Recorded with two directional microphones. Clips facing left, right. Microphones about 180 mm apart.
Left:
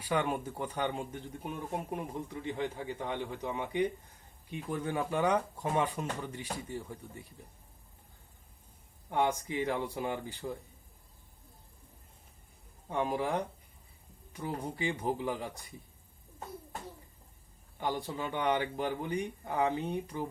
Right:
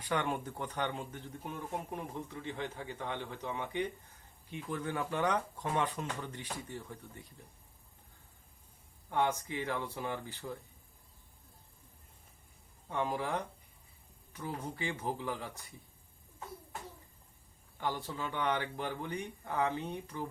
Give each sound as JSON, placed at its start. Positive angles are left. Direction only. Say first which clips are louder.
{"t": 0.0, "sound": "speech", "louder": "left 3 dB", "side_deg": 10}
{"t": 9.0, "sound": "speech", "louder": "left 2 dB", "side_deg": 15}
{"t": 12.9, "sound": "speech", "louder": "left 3 dB", "side_deg": 15}
{"t": 17.7, "sound": "speech", "louder": "left 3 dB", "side_deg": 15}